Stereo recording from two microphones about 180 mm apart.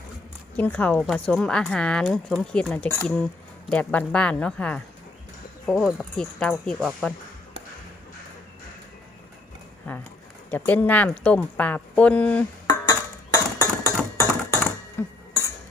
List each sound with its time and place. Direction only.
0.5 s speech: 10° left (ahead or behind)
10.5 s speech: 10° left (ahead or behind)
12.6 s a sound: 20° left (ahead or behind)